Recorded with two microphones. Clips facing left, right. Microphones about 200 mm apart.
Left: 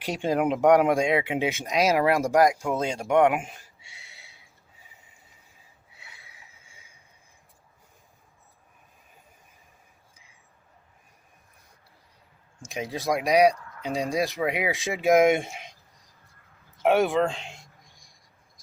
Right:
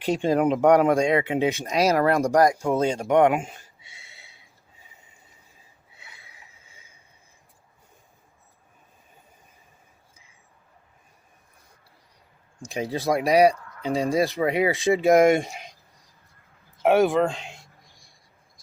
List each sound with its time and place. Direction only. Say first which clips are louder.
0.2 s speech: right 1 dB; 10° left (ahead or behind)
1.6 s speech: even; centre (ahead or behind)
12.7 s speech: right 3 dB; centre (ahead or behind)
16.8 s speech: right 2 dB; centre (ahead or behind)